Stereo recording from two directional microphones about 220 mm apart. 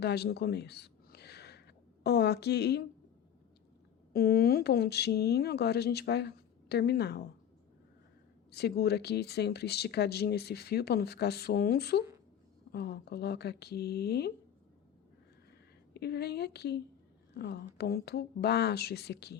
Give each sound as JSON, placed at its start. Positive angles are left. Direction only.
{"t": 0.0, "sound": "speech", "side_deg": 50}
{"t": 4.1, "sound": "speech", "side_deg": 45}
{"t": 8.5, "sound": "speech", "side_deg": 45}
{"t": 16.0, "sound": "a woman's voice", "side_deg": 45}